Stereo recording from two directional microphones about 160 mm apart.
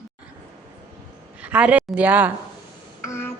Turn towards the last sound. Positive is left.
turn(degrees=15)  # may be behind; listen again after turning